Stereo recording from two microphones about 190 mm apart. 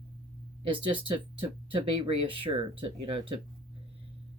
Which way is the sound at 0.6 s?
25° right (ahead or behind).